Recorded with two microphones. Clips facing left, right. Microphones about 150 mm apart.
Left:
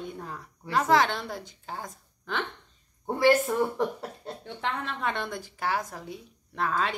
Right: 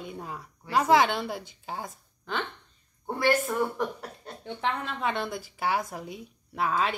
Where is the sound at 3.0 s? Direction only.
25° left (ahead or behind).